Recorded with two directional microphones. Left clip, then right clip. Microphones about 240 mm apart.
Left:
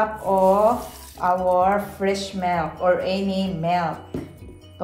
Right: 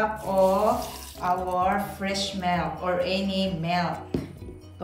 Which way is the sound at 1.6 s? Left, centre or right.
Centre.